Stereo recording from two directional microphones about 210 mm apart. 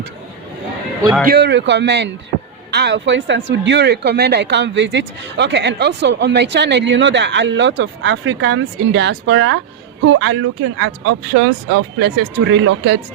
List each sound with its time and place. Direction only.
1.3 s speech: 55° right (ahead or behind)